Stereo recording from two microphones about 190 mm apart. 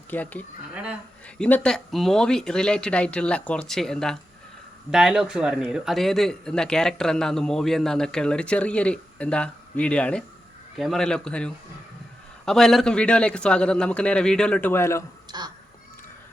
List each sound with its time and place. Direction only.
0.1 s speech: 10° left (ahead or behind)
0.7 s speech: 5° right (ahead or behind)
1.4 s speech: 5° left (ahead or behind)
15.3 s crow: 20° right (ahead or behind)